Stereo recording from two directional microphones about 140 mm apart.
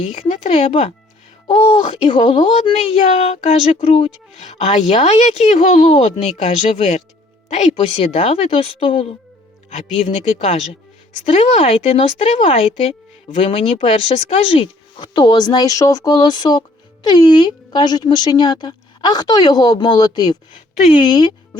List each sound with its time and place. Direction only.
0.1 s a woman's voice: 50° left (ahead or behind)
7.8 s speech: 40° left (ahead or behind)
10.3 s a woman's voice: 45° left (ahead or behind)
13.4 s speech: 40° left (ahead or behind)